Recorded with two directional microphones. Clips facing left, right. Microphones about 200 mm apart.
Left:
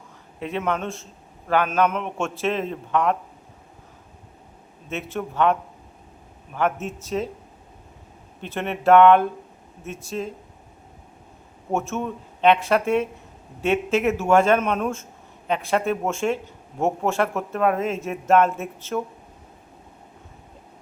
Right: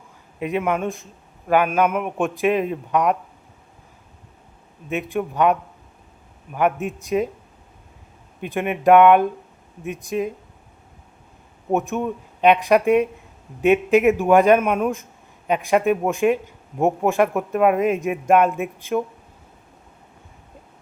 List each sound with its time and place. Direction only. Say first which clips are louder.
0.3 s speech: right 3 dB; 10° right (ahead or behind)
4.9 s speech: right 5 dB; 15° right (ahead or behind)
8.4 s speech: right 4 dB; 10° right (ahead or behind)
11.7 s speech: right 4 dB; 15° right (ahead or behind)